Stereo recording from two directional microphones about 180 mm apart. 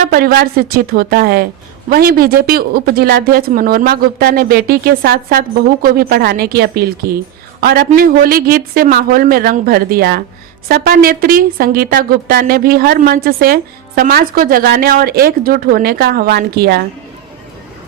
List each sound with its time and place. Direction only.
0.0 s a woman's voice: 55° right (ahead or behind)